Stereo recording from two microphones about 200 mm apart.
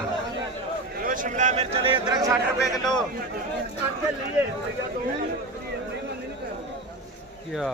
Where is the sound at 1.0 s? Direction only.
40° right (ahead or behind).